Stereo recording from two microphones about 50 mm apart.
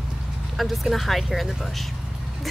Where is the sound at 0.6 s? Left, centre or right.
Centre.